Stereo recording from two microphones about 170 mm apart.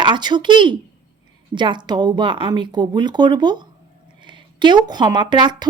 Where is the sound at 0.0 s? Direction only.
25° right (ahead or behind).